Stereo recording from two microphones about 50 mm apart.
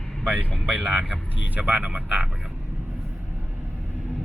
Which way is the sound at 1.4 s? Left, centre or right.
Right.